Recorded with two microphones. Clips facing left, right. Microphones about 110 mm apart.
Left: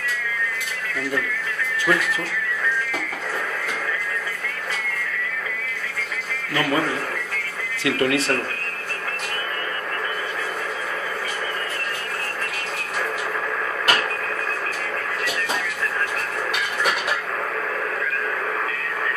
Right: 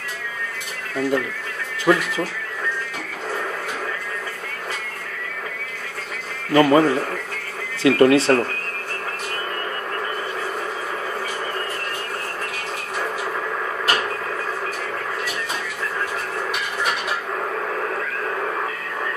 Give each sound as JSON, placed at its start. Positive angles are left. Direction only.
{"t": 1.9, "sound": "speech", "side_deg": -30}
{"t": 6.5, "sound": "speech", "side_deg": -30}